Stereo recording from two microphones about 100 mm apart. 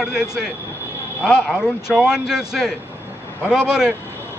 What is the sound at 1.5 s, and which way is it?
Speech, 5° right (ahead or behind).